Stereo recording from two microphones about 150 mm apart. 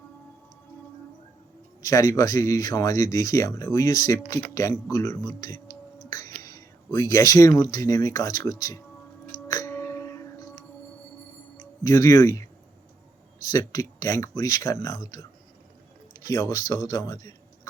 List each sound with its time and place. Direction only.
1.8 s speech: 25° left (ahead or behind)
6.1 s music: 25° left (ahead or behind)
6.4 s speech: 25° left (ahead or behind)
9.5 s music: 20° left (ahead or behind)
11.8 s speech: 20° left (ahead or behind)
13.5 s speech: 20° left (ahead or behind)